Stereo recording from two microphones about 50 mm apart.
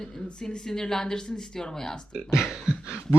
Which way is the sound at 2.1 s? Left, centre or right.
Centre.